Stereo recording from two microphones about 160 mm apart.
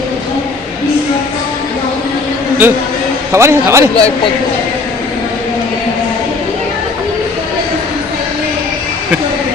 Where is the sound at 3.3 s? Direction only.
15° right (ahead or behind).